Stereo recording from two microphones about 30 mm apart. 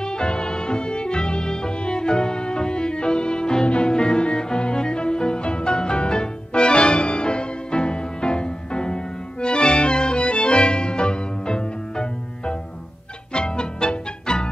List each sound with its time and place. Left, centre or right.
0.0 s music: left